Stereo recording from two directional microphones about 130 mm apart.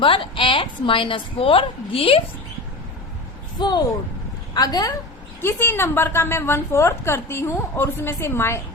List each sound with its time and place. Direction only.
0.0 s a woman's voice: 40° left (ahead or behind)
3.6 s a woman's voice: 35° left (ahead or behind)
5.4 s a woman's voice: 20° left (ahead or behind)